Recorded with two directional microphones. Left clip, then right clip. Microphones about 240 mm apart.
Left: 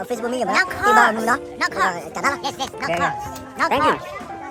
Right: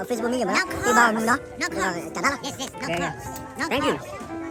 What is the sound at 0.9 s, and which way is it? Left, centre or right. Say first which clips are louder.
Speech: left 2 dB; centre.